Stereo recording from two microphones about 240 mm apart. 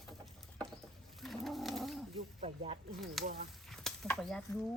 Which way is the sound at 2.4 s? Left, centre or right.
Right.